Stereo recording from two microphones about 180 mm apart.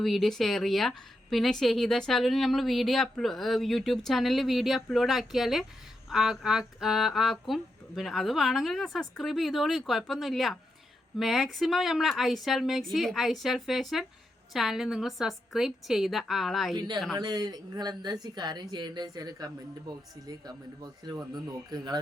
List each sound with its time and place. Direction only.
0.0 s a woman's voice: centre (ahead or behind)
16.7 s speech: 25° right (ahead or behind)